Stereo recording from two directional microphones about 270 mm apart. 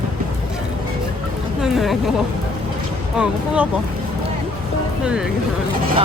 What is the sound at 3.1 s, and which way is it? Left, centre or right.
Speech, centre.